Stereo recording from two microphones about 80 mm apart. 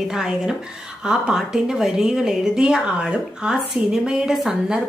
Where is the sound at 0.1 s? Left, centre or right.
Centre.